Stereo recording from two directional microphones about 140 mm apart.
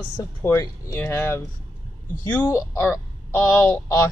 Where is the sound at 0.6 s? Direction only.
20° left (ahead or behind).